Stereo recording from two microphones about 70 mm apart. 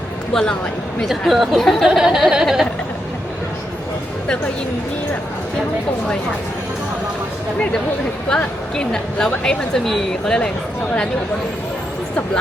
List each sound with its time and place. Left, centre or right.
1.0 s speech: centre
1.9 s a sound: centre
8.3 s a woman's voice: centre